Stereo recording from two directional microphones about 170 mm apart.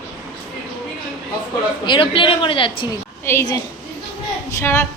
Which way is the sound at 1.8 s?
30° left (ahead or behind).